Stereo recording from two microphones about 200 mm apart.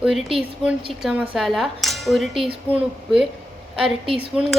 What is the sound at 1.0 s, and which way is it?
A woman's voice, 5° right (ahead or behind).